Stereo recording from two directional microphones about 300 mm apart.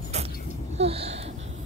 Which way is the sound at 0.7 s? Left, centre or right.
Centre.